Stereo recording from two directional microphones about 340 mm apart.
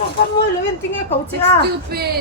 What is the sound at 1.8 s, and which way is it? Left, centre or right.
Speech, right.